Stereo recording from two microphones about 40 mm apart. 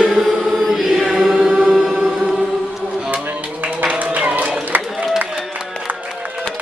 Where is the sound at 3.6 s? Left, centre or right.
Right.